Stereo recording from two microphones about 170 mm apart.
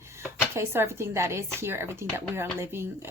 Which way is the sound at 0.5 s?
15° right (ahead or behind).